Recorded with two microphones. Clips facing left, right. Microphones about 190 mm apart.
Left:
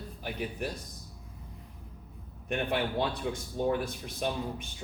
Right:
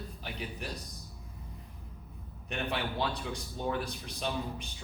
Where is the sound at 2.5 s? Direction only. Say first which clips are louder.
Left 4 dB; 50° left (ahead or behind).